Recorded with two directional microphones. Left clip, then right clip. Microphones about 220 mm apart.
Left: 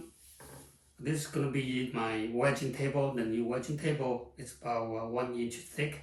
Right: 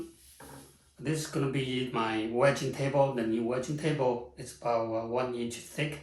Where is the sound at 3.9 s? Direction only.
20° right (ahead or behind).